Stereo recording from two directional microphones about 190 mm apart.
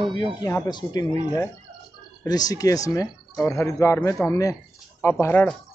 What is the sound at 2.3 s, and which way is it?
Speech, 20° left (ahead or behind).